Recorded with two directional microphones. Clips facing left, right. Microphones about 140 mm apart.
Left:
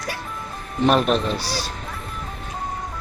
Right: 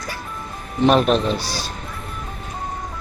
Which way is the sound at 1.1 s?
10° left (ahead or behind).